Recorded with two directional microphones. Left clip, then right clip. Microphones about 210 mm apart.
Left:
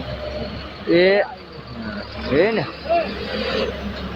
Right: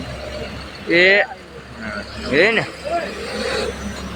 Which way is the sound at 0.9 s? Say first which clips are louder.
Right 2 dB; 15° left (ahead or behind).